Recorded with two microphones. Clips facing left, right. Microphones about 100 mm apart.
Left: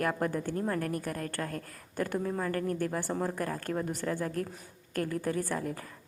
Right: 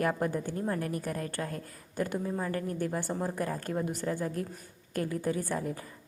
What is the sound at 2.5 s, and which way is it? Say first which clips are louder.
Speech: left 2 dB; 60° left (ahead or behind).